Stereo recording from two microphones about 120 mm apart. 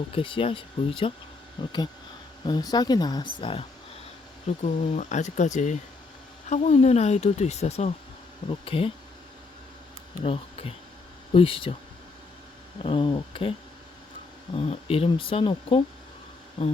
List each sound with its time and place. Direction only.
0.1 s speech: 45° left (ahead or behind)
4.6 s speech: 80° left
6.5 s speech: 70° left (ahead or behind)
8.4 s speech: 50° left (ahead or behind)
10.2 s speech: 55° left (ahead or behind)
12.8 s speech: 45° left (ahead or behind)
14.5 s speech: 55° left (ahead or behind)